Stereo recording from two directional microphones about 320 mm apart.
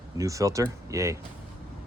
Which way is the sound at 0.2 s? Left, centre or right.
Centre.